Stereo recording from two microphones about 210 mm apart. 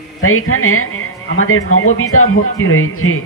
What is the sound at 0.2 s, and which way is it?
Speech, 85° left.